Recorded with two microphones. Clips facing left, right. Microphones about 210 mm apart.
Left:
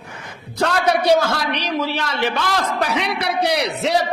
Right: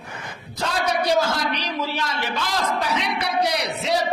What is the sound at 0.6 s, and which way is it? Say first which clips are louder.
A man's voice: left 5 dB; 65° left (ahead or behind).